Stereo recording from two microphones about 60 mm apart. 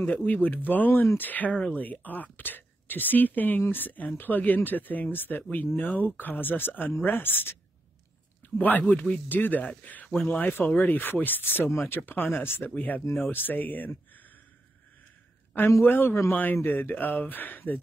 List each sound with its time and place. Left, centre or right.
0.0 s speech: left
8.5 s speech: left
15.8 s speech: left